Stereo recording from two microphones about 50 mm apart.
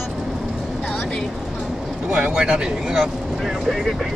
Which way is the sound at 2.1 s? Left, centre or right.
Centre.